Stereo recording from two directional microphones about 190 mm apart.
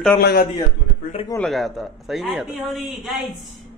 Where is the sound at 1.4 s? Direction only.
Centre (ahead or behind).